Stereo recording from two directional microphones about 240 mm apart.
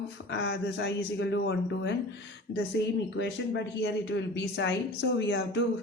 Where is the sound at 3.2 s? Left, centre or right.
Left.